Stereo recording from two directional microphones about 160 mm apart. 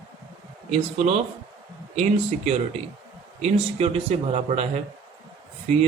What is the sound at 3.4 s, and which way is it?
Speech, 40° right (ahead or behind).